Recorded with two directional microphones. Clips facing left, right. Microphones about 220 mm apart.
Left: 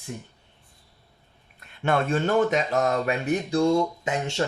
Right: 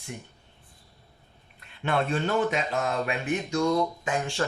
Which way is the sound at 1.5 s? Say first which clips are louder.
Left 3 dB; 45° left (ahead or behind).